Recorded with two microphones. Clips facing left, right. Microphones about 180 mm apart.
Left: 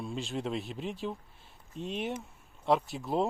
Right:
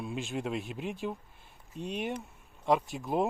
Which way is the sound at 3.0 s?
15° right (ahead or behind).